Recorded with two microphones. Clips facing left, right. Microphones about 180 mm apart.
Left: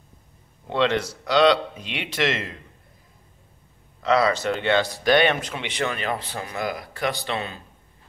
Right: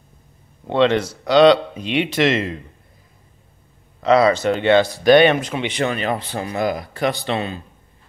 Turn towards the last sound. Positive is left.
turn(degrees=-25)  # may be behind; listen again after turning